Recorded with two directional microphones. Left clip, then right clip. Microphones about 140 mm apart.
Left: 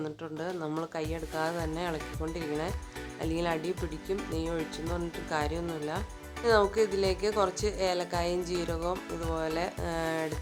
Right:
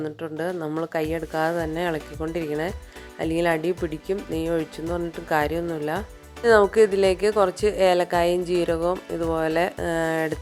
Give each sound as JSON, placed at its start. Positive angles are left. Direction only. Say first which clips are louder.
{"t": 0.0, "sound": "speech", "louder": "right 8 dB", "side_deg": -35}